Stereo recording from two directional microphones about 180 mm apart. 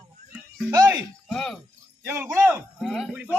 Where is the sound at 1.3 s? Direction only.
Centre (ahead or behind).